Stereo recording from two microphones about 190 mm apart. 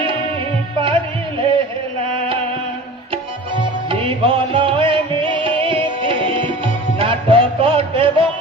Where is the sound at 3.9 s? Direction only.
25° right (ahead or behind).